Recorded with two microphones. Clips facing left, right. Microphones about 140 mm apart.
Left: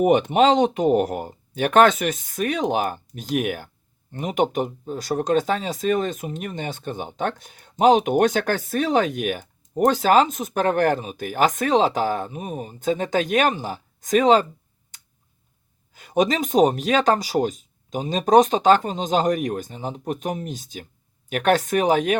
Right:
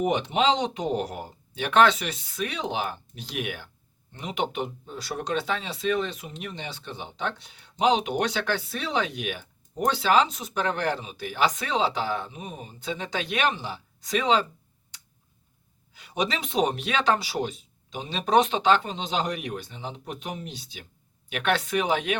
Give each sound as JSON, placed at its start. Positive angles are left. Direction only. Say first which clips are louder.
{"t": 0.0, "sound": "speech", "louder": "left 7 dB", "side_deg": 50}
{"t": 14.9, "sound": "tick-tock", "louder": "even", "side_deg": 45}
{"t": 16.0, "sound": "speech", "louder": "left 8 dB", "side_deg": 45}